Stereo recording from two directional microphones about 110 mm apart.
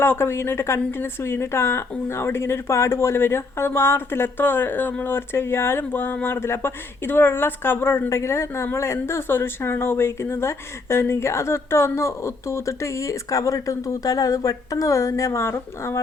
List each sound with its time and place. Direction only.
0.0 s a woman's voice: 20° left (ahead or behind)